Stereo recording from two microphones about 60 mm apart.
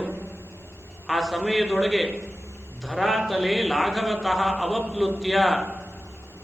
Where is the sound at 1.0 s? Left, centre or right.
Centre.